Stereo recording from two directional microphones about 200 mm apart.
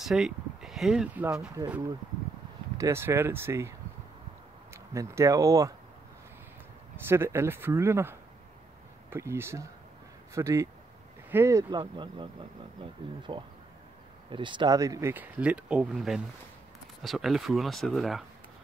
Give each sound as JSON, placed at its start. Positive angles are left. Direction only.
{"t": 0.0, "sound": "speech", "side_deg": 0}
{"t": 2.8, "sound": "speech", "side_deg": -10}
{"t": 4.7, "sound": "speech", "side_deg": -15}
{"t": 7.1, "sound": "speech", "side_deg": -10}
{"t": 13.3, "sound": "speech", "side_deg": -25}